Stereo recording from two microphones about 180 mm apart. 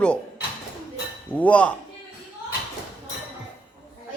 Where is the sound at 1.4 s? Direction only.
5° left (ahead or behind).